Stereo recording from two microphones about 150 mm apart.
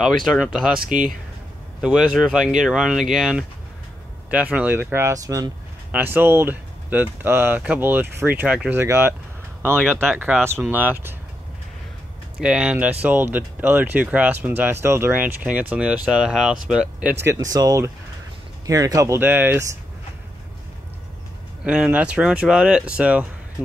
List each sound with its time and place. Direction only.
0.2 s speech: centre (ahead or behind)
0.7 s speech: 65° right (ahead or behind)
1.8 s speech: 5° right (ahead or behind); by 5.5 s 25° right (ahead or behind)
5.9 s speech: 10° right (ahead or behind)
12.4 s speech: 5° right (ahead or behind)
17.3 s speech: 25° right (ahead or behind)
21.6 s speech: 5° right (ahead or behind)